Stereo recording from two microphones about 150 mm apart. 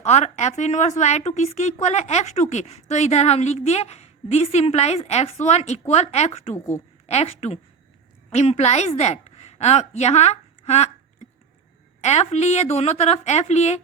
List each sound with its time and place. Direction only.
0.0 s a woman's voice: 45° left (ahead or behind)
12.0 s a woman's voice: 45° left (ahead or behind)